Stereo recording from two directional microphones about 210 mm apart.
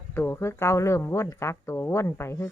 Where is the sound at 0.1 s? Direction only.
10° left (ahead or behind).